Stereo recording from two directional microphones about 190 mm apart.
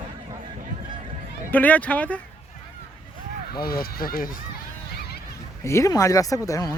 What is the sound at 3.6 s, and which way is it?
Speech, 50° left (ahead or behind).